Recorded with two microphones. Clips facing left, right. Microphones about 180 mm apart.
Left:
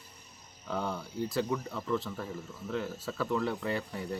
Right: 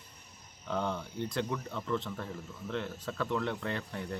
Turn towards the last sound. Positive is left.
turn(degrees=5)  # may be behind; listen again after turning